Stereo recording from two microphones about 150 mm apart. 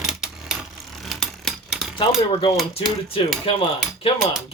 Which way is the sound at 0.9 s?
Centre (ahead or behind).